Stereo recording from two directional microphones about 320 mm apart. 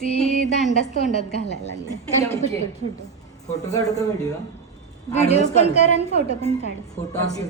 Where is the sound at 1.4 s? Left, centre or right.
Left.